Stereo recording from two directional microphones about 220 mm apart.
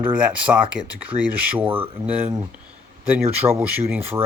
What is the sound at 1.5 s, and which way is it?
Speech, 10° right (ahead or behind).